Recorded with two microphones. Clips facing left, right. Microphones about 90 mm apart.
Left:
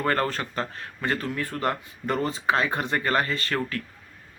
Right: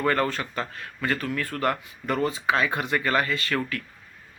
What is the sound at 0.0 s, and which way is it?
A man's voice, 40° left (ahead or behind).